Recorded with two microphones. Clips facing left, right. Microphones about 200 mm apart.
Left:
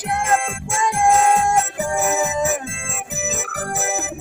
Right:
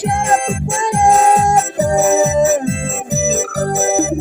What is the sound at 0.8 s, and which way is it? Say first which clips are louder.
Music: right 3 dB; 35° right (ahead or behind).